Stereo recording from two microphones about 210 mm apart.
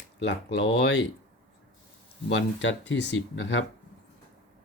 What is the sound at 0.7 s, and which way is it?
Speech, 55° left (ahead or behind).